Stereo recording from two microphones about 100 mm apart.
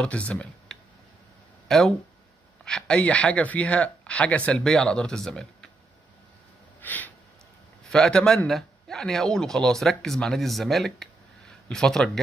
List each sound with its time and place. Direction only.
0.0 s a man's voice: 10° left (ahead or behind)
6.8 s a sound: 15° left (ahead or behind)
7.9 s a man's voice: 5° left (ahead or behind)